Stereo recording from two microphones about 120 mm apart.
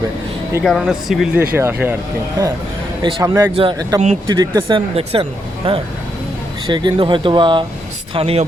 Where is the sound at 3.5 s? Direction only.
45° right (ahead or behind).